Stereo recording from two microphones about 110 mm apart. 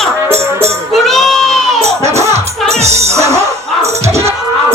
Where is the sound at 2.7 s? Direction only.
80° right.